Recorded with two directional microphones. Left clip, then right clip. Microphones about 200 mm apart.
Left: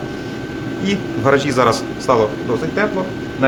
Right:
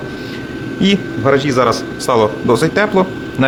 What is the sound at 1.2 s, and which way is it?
Speech, 15° right (ahead or behind).